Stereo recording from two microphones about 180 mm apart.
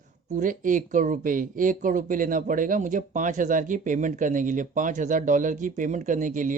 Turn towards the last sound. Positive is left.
turn(degrees=-45)  # may be behind; listen again after turning